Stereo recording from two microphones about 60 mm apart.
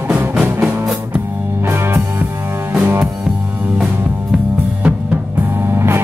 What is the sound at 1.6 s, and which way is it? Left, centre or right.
Music, right.